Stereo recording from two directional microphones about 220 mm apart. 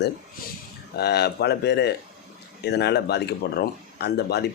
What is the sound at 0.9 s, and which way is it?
Speech, 50° left (ahead or behind).